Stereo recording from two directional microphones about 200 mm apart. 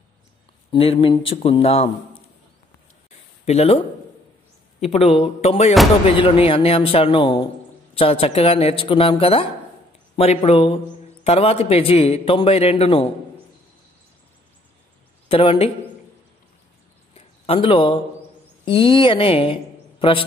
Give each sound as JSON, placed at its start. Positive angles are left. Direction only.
{"t": 0.7, "sound": "a man's voice", "side_deg": 25}
{"t": 3.4, "sound": "speech", "side_deg": 30}
{"t": 4.8, "sound": "a man's voice", "side_deg": 30}
{"t": 15.2, "sound": "speech", "side_deg": 25}
{"t": 17.1, "sound": "a sound", "side_deg": 25}
{"t": 18.7, "sound": "a woman's voice", "side_deg": 25}